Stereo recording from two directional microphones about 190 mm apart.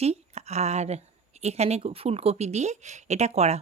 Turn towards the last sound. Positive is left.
turn(degrees=-35)  # may be behind; listen again after turning